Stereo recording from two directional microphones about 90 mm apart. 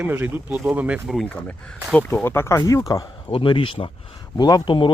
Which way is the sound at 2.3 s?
25° left (ahead or behind).